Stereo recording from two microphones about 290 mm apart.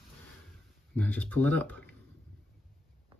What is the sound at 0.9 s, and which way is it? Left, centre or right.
Speech, centre.